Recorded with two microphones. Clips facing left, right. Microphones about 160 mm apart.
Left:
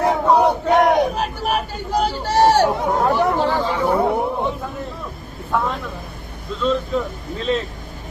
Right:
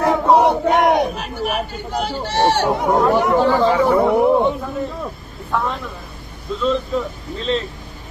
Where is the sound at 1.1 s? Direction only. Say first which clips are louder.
Left 1 dB; 40° left (ahead or behind).